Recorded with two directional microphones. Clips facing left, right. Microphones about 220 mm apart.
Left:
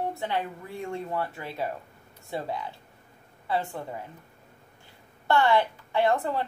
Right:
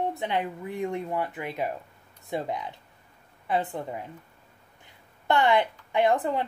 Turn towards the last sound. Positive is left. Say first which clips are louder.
# right 1 dB
turn(degrees=-20)  # may be behind; listen again after turning